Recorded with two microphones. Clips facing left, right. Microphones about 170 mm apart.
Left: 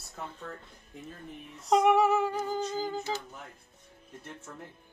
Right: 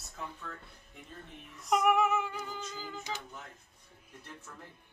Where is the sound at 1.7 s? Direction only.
30° left (ahead or behind).